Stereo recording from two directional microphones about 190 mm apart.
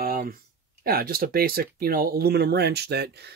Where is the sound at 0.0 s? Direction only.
50° right (ahead or behind).